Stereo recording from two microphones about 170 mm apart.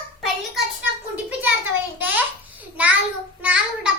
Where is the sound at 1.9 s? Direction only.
10° right (ahead or behind).